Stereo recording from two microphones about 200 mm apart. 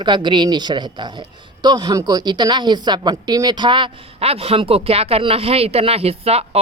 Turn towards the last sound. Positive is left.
turn(degrees=-30)  # may be behind; listen again after turning